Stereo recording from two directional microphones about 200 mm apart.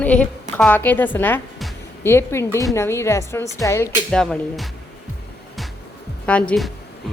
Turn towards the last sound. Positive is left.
turn(degrees=5)  # may be behind; listen again after turning